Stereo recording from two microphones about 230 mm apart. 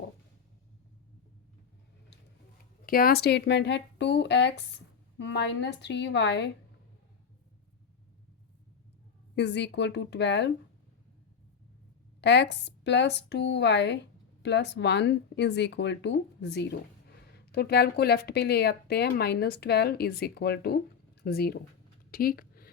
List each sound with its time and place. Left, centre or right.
2.8 s a woman's voice: left
9.3 s a woman's voice: left
12.2 s a woman's voice: left
22.1 s a sound: left